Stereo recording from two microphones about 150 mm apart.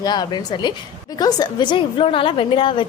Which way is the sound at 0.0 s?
30° left (ahead or behind).